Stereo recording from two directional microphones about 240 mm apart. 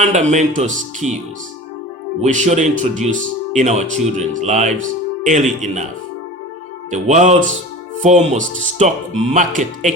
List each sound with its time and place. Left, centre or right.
0.0 s speech: right
2.2 s speech: right
6.9 s speech: right